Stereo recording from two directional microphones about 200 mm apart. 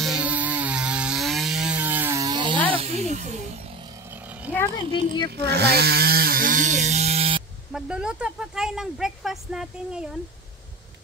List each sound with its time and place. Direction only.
0.0 s chainsaw: 5° right (ahead or behind); by 2.6 s 25° right (ahead or behind)
2.7 s speech: 30° right (ahead or behind)
4.1 s a sound: 5° right (ahead or behind)
5.3 s speech: 55° right (ahead or behind); by 7.4 s 30° right (ahead or behind)
7.7 s speech: 5° right (ahead or behind)